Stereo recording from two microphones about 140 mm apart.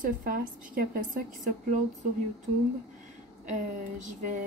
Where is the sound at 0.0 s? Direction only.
90° right.